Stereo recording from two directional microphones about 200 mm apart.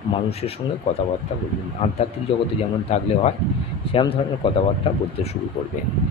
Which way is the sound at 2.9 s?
35° left (ahead or behind).